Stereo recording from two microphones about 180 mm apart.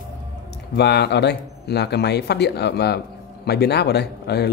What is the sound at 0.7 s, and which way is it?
Speech, 65° left (ahead or behind).